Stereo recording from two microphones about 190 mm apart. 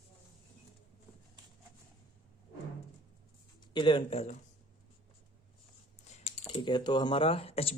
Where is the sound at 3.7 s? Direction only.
25° left (ahead or behind).